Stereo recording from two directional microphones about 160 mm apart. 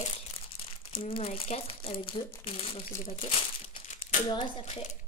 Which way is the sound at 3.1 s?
40° left (ahead or behind).